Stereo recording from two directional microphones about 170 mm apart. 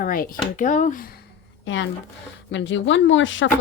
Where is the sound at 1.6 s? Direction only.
90° left.